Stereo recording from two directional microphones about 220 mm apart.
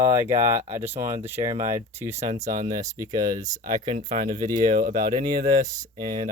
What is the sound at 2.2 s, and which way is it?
Speech, 35° right (ahead or behind).